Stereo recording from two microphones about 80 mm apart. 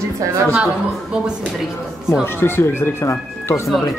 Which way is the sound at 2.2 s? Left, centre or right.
Left.